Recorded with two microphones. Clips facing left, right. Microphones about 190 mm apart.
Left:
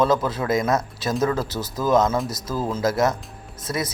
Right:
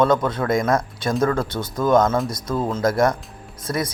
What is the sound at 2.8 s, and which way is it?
Speech, 25° left (ahead or behind).